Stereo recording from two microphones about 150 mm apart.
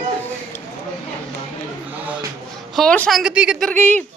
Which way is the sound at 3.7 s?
10° left (ahead or behind).